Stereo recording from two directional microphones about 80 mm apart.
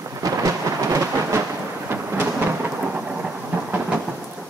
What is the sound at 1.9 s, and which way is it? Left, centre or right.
Thunder, right.